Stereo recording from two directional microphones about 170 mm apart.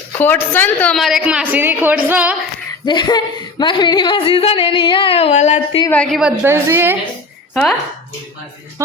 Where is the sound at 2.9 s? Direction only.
25° left (ahead or behind); by 5.8 s 45° left (ahead or behind).